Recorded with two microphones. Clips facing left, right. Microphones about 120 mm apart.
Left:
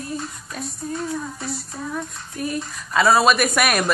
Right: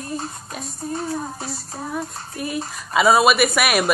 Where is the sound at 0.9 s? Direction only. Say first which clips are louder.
Right 2 dB; 35° right (ahead or behind).